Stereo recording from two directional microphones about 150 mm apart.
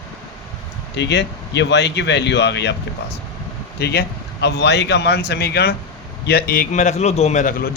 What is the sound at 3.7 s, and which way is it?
Speech, 90° left.